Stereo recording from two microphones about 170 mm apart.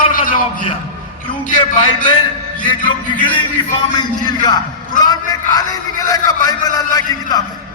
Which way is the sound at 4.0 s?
25° left (ahead or behind).